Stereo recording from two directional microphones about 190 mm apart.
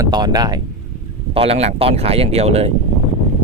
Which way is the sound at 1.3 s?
30° right (ahead or behind).